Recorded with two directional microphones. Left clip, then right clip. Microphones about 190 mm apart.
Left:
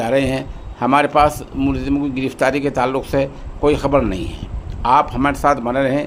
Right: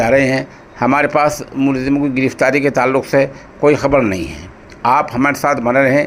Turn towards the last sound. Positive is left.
turn(degrees=-10)  # may be behind; listen again after turning